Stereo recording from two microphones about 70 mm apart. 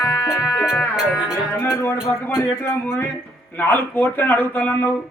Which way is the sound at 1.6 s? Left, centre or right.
Left.